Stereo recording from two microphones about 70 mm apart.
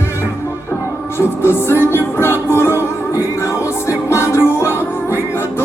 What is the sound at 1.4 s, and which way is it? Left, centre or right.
Music, left.